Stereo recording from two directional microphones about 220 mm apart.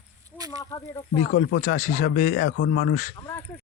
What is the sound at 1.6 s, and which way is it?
Speech, 40° left (ahead or behind).